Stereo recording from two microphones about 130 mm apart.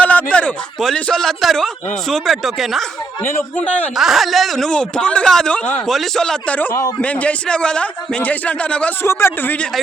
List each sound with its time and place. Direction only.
0.0 s speech: 10° left (ahead or behind)
3.9 s a man's voice: centre (ahead or behind); by 9.6 s 20° left (ahead or behind)